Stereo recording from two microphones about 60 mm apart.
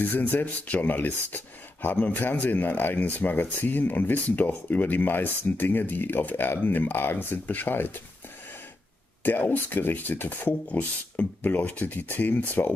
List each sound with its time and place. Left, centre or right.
0.0 s speech: left
9.2 s speech: left